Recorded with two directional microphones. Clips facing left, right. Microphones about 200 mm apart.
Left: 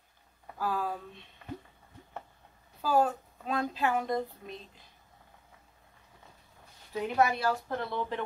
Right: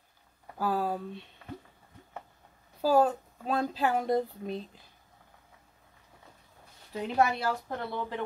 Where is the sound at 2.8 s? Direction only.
35° right (ahead or behind).